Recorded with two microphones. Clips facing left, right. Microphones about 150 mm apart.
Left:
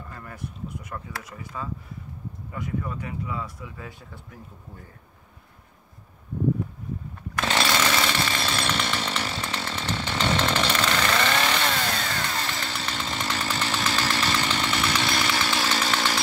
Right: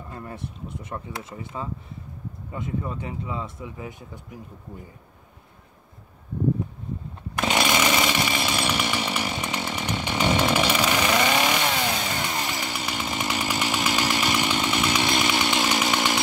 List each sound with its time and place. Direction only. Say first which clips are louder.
0.1 s speech: right 5 dB; 25° right (ahead or behind)
7.3 s chainsaw: right 2 dB; 15° right (ahead or behind)